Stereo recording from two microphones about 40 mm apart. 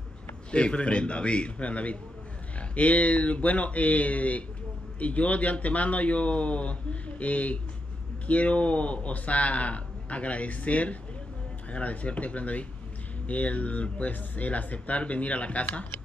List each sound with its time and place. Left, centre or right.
0.5 s a man's voice: left